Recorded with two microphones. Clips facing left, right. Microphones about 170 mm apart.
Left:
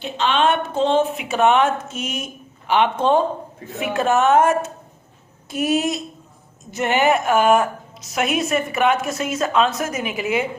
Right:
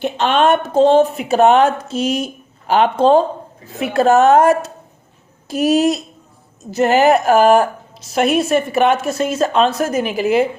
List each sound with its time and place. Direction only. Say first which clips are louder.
0.0 s a woman's voice: right 4 dB; 50° right (ahead or behind)